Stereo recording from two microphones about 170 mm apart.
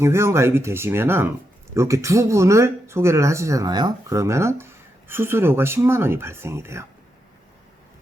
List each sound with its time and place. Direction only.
0.0 s speech: 15° right (ahead or behind)